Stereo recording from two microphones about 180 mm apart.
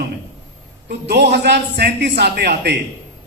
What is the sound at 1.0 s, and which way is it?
A man's voice, 60° right (ahead or behind).